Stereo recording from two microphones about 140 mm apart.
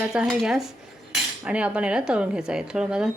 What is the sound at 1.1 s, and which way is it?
Cutlery, 5° right (ahead or behind).